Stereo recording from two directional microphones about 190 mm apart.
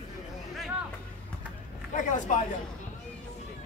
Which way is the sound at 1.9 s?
40° left (ahead or behind).